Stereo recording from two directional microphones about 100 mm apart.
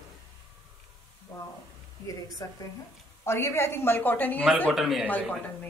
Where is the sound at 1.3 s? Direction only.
25° left (ahead or behind).